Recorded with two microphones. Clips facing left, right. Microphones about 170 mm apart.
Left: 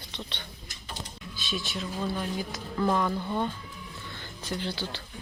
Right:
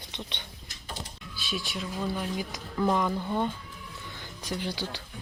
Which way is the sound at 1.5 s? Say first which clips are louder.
Even; 10° right (ahead or behind).